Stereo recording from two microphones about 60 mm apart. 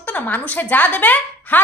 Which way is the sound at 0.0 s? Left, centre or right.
Left.